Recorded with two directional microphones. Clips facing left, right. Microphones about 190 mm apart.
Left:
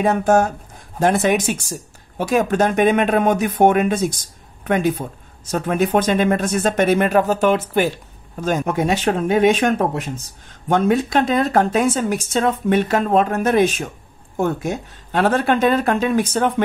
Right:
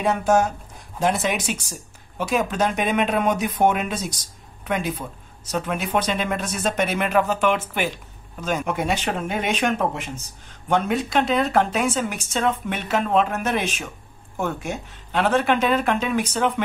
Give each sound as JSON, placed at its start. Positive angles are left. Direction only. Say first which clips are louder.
{"t": 0.0, "sound": "speech", "louder": "left 4 dB", "side_deg": 50}